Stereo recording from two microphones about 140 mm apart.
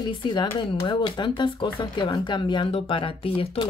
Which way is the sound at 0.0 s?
30° left (ahead or behind).